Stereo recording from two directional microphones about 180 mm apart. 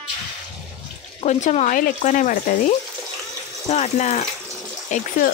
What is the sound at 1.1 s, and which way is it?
A woman's voice, 40° left (ahead or behind).